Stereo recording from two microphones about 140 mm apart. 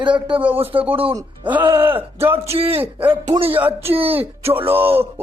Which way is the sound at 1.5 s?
15° right (ahead or behind).